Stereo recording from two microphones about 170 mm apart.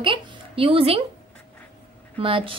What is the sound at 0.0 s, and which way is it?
A woman's voice, 30° right (ahead or behind).